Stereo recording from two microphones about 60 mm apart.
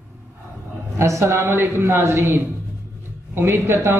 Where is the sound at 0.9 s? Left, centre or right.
Right.